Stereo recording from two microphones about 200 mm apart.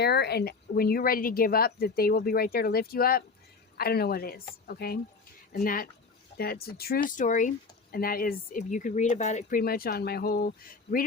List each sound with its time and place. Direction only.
0.0 s speech: 55° left (ahead or behind)